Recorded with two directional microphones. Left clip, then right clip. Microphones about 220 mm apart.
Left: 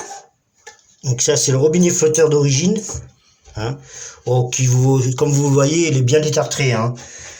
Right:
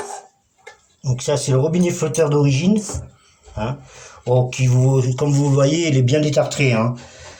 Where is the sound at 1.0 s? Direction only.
50° left (ahead or behind).